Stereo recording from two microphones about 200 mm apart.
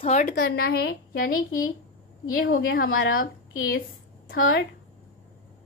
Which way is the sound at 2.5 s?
45° left (ahead or behind).